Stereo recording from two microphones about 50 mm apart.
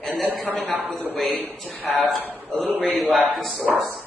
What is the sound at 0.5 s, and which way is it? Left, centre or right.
Speech, left.